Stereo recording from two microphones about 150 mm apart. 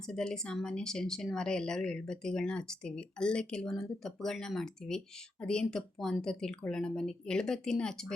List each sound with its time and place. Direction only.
0.0 s speech: 5° left (ahead or behind)